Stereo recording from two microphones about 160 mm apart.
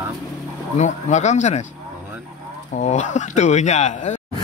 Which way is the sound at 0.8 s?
45° left (ahead or behind).